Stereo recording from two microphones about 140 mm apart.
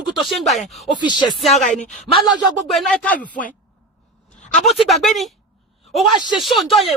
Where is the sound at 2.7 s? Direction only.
5° left (ahead or behind).